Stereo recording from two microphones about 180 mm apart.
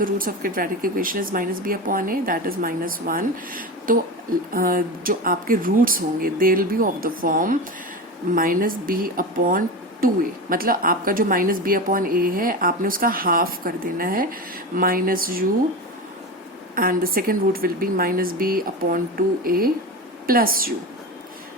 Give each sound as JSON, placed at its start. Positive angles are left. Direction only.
{"t": 0.0, "sound": "speech", "side_deg": -50}
{"t": 16.7, "sound": "speech", "side_deg": -55}